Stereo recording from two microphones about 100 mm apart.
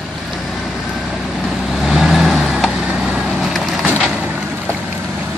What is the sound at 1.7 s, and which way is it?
Vehicle, 5° right (ahead or behind).